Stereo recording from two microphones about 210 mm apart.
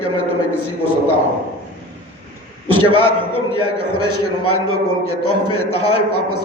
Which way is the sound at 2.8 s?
90° left.